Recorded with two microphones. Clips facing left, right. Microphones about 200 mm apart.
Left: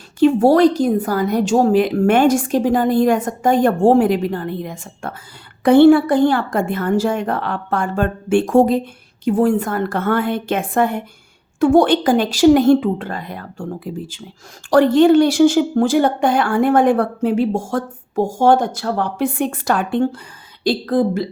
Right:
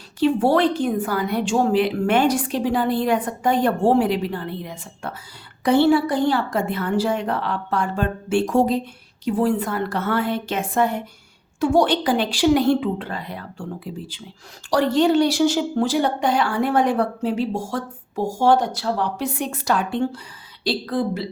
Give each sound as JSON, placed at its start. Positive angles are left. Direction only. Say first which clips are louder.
{"t": 0.2, "sound": "speech", "louder": "left 6 dB", "side_deg": 45}